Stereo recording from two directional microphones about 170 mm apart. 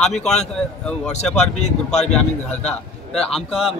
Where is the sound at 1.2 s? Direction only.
40° left (ahead or behind).